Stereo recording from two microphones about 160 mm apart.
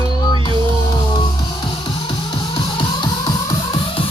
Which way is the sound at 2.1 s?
35° left (ahead or behind).